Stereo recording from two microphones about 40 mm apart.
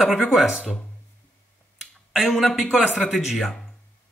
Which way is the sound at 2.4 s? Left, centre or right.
Centre.